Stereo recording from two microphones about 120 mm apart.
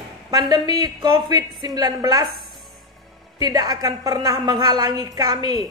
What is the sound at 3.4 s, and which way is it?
A woman's voice, 30° right (ahead or behind).